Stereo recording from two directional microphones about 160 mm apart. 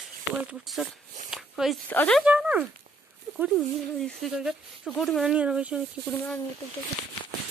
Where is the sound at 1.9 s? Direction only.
10° left (ahead or behind).